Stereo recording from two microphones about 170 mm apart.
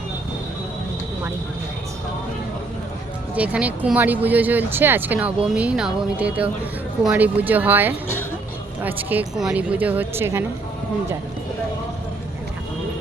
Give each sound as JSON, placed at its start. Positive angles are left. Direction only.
{"t": 3.3, "sound": "speech", "side_deg": -10}